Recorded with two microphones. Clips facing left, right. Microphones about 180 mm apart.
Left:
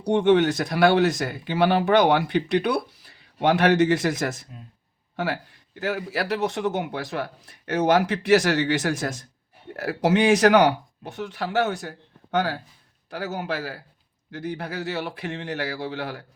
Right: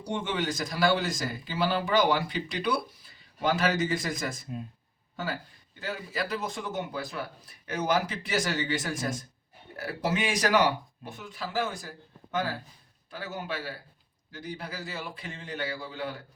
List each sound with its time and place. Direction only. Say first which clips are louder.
0.0 s a man's voice: left 13 dB; 65° left (ahead or behind); by 13.7 s 80° left
14.3 s a man's voice: left 7 dB; 70° left (ahead or behind)